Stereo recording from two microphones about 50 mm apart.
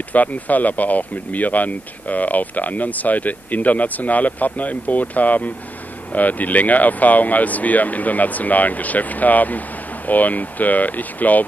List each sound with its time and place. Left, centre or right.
0.1 s speech: left